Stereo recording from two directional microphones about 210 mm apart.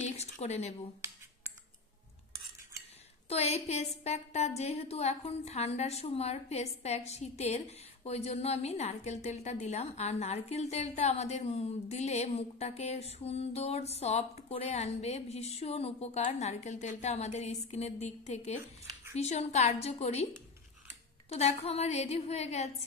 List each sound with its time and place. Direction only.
0.2 s speech: 30° left (ahead or behind)
3.3 s a woman's voice: 30° left (ahead or behind)
21.3 s a woman's voice: 30° left (ahead or behind)